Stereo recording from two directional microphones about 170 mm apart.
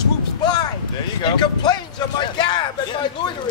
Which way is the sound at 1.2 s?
25° left (ahead or behind).